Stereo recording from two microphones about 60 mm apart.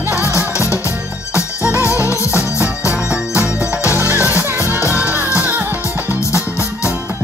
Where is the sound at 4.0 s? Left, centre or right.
Right.